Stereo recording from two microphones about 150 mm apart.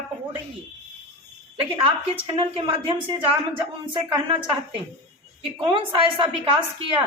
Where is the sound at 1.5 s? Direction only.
35° right (ahead or behind).